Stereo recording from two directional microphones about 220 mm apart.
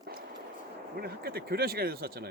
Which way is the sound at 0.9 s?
45° right (ahead or behind).